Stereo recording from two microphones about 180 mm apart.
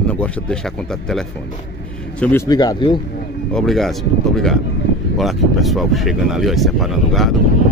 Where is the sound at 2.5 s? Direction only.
20° left (ahead or behind).